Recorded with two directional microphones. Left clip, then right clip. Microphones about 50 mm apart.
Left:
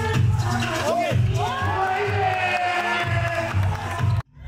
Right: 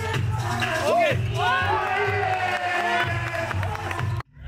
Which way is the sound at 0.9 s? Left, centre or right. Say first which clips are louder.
Right 2 dB; right.